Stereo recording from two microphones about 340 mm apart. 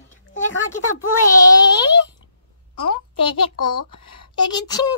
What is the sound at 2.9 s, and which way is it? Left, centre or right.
Speech, left.